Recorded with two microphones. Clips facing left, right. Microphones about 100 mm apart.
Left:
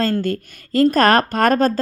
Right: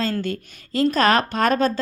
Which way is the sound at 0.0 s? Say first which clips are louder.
Left 5 dB; 45° left (ahead or behind).